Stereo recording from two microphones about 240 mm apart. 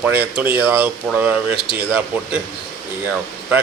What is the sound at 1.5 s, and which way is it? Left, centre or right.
Speech, left.